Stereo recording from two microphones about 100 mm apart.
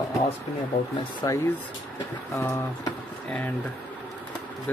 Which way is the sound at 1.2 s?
35° left (ahead or behind).